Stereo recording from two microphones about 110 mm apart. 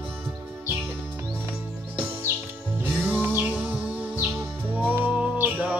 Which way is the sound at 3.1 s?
15° right (ahead or behind).